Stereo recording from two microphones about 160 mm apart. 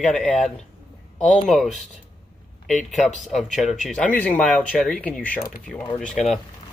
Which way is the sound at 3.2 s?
Centre (ahead or behind).